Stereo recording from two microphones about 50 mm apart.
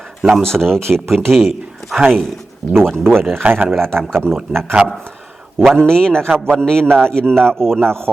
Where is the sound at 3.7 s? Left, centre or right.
Right.